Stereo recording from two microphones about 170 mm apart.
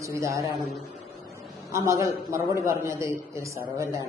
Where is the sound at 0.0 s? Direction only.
15° right (ahead or behind).